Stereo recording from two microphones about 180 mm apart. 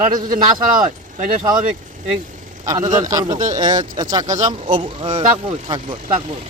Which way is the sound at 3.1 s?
20° right (ahead or behind).